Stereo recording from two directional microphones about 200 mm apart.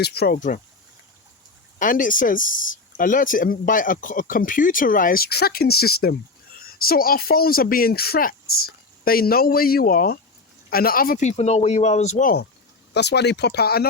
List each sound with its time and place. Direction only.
0.0 s speech: 55° left (ahead or behind)
0.3 s speech: 40° left (ahead or behind)
1.8 s speech: 40° left (ahead or behind)
12.9 s speech: 55° left (ahead or behind)